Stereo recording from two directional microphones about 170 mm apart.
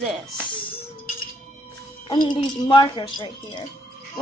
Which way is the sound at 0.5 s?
30° left (ahead or behind).